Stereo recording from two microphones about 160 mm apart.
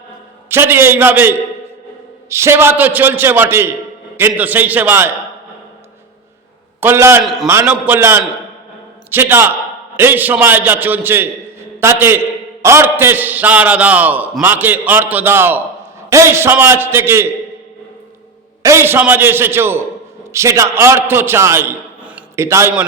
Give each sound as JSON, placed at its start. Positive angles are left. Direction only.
{"t": 0.4, "sound": "a man's voice", "side_deg": -15}
{"t": 2.3, "sound": "a man's voice", "side_deg": -15}
{"t": 6.7, "sound": "a man's voice", "side_deg": -15}
{"t": 7.2, "sound": "a man's voice", "side_deg": 0}
{"t": 7.4, "sound": "a man's voice", "side_deg": -15}
{"t": 18.6, "sound": "a man's voice", "side_deg": -15}